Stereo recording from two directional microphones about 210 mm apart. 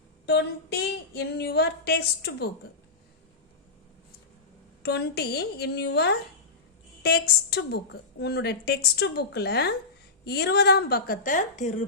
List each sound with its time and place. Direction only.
0.3 s child singing: 50° left (ahead or behind)
4.8 s child singing: 50° left (ahead or behind)